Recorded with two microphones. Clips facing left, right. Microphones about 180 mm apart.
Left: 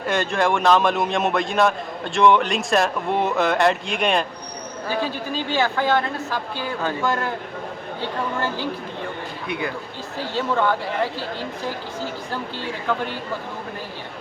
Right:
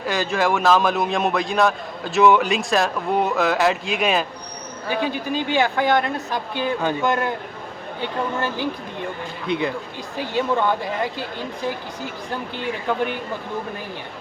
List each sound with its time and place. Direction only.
0.0 s a man's voice: centre (ahead or behind)
4.9 s speech: 15° right (ahead or behind)
10.2 s speech: 15° right (ahead or behind)
12.9 s speech: 15° right (ahead or behind)